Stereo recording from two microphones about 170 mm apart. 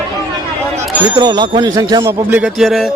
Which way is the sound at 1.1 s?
25° right (ahead or behind).